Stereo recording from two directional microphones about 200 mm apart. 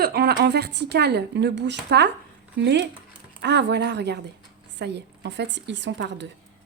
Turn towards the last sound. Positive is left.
turn(degrees=-60)  # may be behind; listen again after turning